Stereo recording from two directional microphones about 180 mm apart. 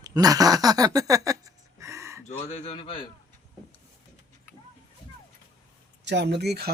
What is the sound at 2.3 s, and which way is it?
Speech, 35° left (ahead or behind).